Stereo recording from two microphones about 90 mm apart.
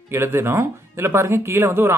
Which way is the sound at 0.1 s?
25° right (ahead or behind).